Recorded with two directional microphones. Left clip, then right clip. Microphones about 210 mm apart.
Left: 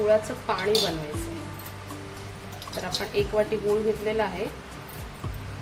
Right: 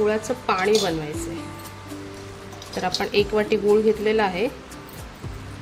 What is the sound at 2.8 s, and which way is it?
A woman's voice, 50° right (ahead or behind).